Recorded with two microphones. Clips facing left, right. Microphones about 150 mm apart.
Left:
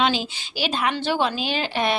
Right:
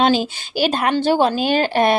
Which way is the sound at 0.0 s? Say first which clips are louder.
Right 6 dB; 45° right (ahead or behind).